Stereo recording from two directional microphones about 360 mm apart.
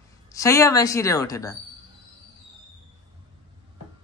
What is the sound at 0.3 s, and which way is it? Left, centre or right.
A woman's voice, centre.